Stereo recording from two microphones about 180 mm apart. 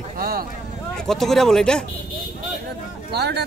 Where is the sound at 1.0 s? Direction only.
Centre (ahead or behind).